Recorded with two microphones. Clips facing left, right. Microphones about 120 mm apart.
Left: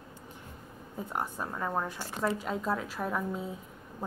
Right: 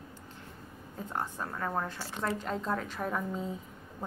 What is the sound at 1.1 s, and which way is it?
A woman's voice, 15° left (ahead or behind).